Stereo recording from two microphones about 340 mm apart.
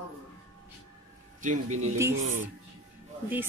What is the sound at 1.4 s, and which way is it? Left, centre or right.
Speech, right.